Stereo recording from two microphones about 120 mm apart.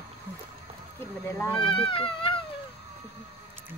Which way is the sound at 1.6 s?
45° left (ahead or behind).